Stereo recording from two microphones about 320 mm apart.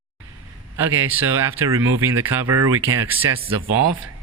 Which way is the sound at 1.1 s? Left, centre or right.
Centre.